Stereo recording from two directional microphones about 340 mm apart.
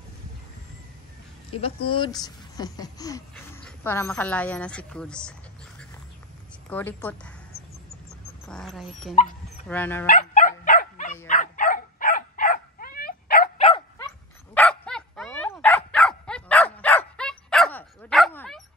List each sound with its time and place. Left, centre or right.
1.6 s speech: centre
6.7 s a woman's voice: centre
8.1 s dog: centre
9.7 s a woman's voice: centre
10.0 s dog: left
14.5 s dog: centre